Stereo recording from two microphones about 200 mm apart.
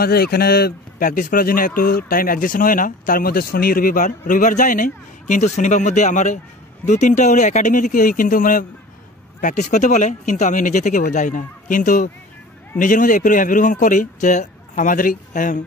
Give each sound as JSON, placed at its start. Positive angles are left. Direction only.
{"t": 0.0, "sound": "speech", "side_deg": 50}